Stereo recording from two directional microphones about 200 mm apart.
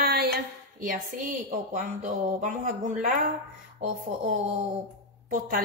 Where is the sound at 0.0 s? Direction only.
50° right (ahead or behind).